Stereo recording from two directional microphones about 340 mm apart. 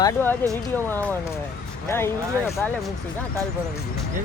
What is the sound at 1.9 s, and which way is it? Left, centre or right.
Speech, centre.